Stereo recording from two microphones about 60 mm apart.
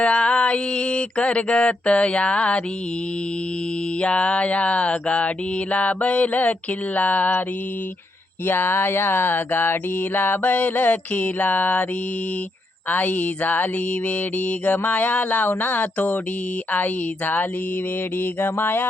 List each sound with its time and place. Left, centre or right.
0.0 s mantra: centre
4.0 s mantra: centre
8.4 s speech: left
10.2 s mantra: left
12.9 s mantra: left
18.3 s speech: left